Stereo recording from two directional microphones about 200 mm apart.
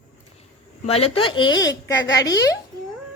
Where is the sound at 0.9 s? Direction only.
30° left (ahead or behind).